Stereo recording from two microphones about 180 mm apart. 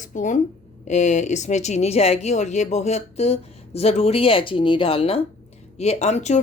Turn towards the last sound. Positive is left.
turn(degrees=40)  # may be behind; listen again after turning